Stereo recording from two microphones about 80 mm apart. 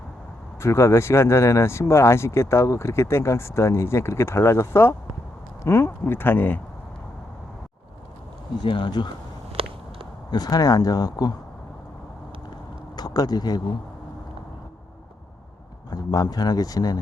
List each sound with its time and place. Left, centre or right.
0.6 s speech: left
8.6 s speech: left
10.3 s speech: left
13.0 s speech: left
15.9 s speech: left